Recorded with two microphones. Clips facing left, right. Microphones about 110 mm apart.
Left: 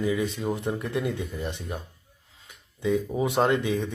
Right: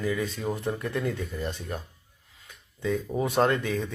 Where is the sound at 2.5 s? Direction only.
15° left (ahead or behind).